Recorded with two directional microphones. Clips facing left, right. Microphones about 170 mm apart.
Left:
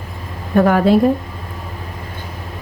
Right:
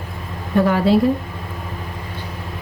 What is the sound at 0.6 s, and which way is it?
Speech, 50° left (ahead or behind).